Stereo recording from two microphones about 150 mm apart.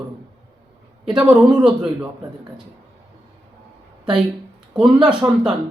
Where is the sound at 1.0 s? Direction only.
5° right (ahead or behind).